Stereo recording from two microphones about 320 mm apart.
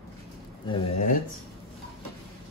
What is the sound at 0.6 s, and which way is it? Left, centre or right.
Speech, centre.